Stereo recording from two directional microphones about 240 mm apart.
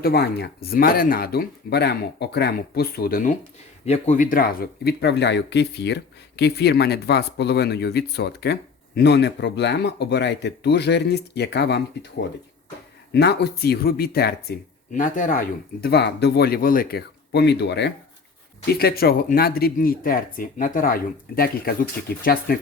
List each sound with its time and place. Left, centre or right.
0.0 s speech: left
13.1 s speech: left